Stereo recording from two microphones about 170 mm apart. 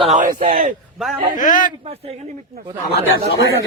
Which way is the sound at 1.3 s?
50° left (ahead or behind).